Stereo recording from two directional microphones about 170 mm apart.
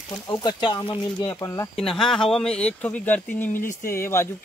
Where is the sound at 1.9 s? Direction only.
Centre (ahead or behind).